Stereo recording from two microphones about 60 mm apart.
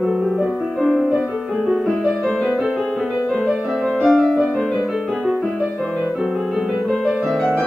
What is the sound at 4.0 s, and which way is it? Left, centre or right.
Music, centre.